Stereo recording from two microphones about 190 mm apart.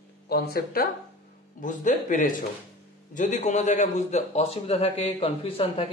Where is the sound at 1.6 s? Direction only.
40° left (ahead or behind).